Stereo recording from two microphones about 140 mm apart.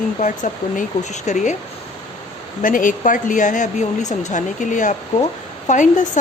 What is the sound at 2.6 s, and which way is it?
A woman's voice, 70° left (ahead or behind).